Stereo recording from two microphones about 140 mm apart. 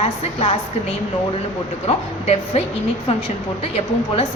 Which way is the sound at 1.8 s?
50° left (ahead or behind).